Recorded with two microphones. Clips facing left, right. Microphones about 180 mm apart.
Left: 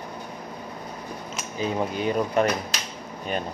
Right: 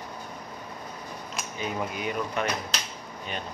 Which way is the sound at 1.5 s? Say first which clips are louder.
Left 6 dB; 30° left (ahead or behind).